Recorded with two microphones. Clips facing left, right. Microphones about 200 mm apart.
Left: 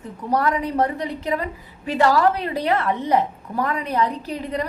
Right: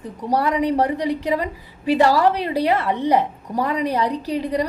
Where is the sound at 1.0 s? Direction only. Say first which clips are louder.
Right 4 dB; 15° right (ahead or behind).